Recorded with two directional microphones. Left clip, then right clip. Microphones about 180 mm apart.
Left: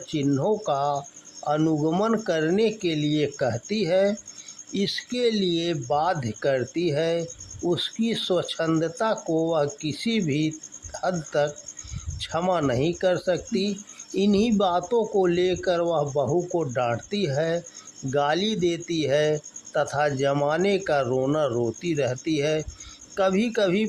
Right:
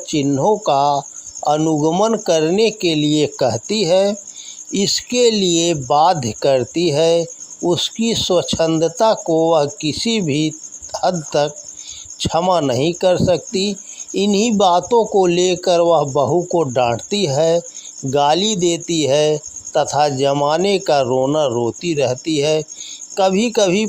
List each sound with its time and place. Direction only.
0.1 s speech: 25° right (ahead or behind)